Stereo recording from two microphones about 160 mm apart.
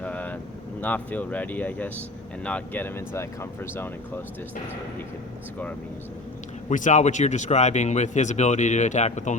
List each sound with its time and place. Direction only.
0.0 s a sound: 10° left (ahead or behind)
0.8 s speech: 10° left (ahead or behind)
6.7 s speech: 50° left (ahead or behind)